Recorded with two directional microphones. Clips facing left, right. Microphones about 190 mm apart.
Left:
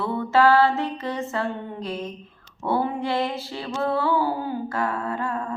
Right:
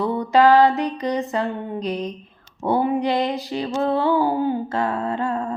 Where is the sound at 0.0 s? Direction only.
15° right (ahead or behind).